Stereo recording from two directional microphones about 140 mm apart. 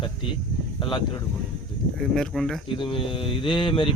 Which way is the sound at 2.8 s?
35° left (ahead or behind).